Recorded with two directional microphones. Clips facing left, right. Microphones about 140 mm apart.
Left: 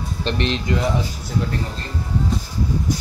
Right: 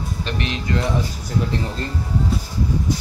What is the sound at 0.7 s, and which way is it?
Speech, 15° left (ahead or behind).